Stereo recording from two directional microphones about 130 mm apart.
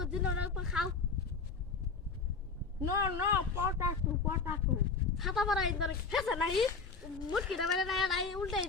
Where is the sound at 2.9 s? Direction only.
25° right (ahead or behind).